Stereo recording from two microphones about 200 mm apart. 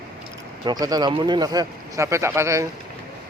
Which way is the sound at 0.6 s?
20° right (ahead or behind).